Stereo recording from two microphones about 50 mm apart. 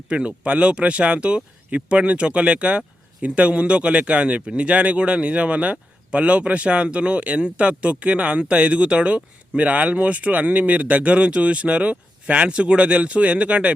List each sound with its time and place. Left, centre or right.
0.1 s speech: right